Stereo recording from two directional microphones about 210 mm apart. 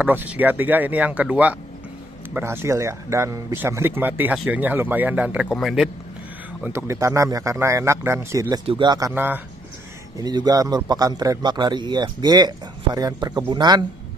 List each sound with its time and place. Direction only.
0.0 s speech: 10° right (ahead or behind)
6.6 s a man's voice: 15° right (ahead or behind)